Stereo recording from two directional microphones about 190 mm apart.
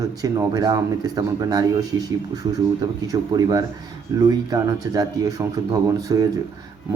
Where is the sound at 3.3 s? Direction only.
20° right (ahead or behind).